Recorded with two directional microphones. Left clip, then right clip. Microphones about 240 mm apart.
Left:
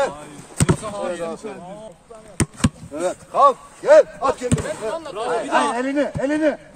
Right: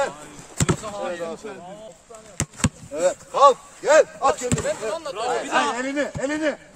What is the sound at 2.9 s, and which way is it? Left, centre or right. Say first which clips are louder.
Speech: left 1 dB; right.